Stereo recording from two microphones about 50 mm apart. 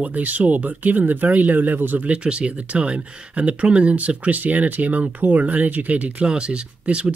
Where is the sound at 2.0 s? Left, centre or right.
Right.